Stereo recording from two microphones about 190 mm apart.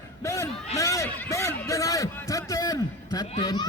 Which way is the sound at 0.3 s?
15° left (ahead or behind).